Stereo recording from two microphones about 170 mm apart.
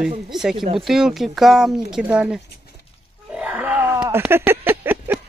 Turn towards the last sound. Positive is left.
turn(degrees=-10)  # may be behind; listen again after turning